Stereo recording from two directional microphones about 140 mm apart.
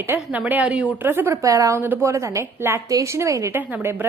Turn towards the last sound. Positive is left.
turn(degrees=-15)  # may be behind; listen again after turning